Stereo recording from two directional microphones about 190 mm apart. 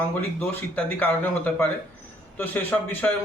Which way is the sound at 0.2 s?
10° left (ahead or behind).